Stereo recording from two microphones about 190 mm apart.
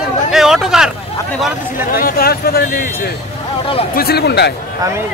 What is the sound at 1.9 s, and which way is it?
Speech, 50° left (ahead or behind).